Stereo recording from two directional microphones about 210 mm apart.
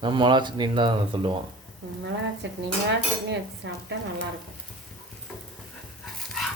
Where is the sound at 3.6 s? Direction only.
60° right (ahead or behind).